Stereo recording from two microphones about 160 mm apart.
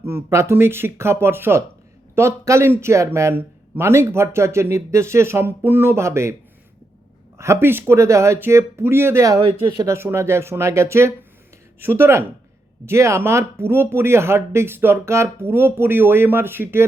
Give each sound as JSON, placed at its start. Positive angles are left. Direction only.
{"t": 0.0, "sound": "a man's voice", "side_deg": -15}
{"t": 7.3, "sound": "a man's voice", "side_deg": -15}